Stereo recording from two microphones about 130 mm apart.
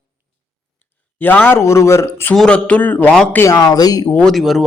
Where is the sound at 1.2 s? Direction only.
15° left (ahead or behind).